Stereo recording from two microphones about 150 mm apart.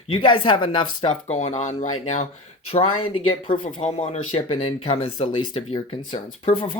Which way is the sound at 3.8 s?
45° left (ahead or behind).